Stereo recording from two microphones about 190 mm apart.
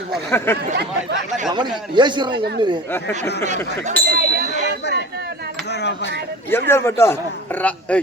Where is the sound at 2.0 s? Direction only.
25° right (ahead or behind).